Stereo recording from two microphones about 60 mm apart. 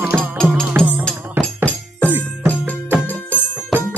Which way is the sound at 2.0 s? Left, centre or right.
Right.